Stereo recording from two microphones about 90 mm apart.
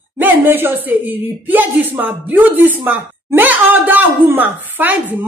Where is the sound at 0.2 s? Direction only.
25° right (ahead or behind).